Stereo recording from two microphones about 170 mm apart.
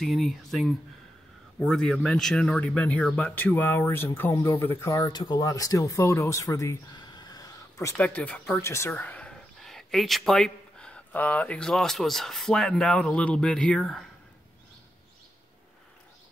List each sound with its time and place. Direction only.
0.0 s speech: centre (ahead or behind); by 7.9 s 20° left (ahead or behind)
7.9 s speech: 10° left (ahead or behind)